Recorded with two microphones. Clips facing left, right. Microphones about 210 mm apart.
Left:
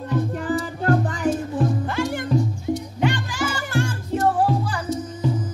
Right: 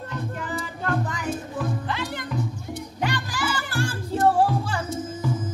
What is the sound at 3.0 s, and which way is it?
Music, 35° right (ahead or behind).